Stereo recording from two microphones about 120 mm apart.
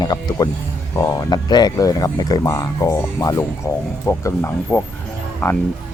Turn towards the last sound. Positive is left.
turn(degrees=20)  # may be behind; listen again after turning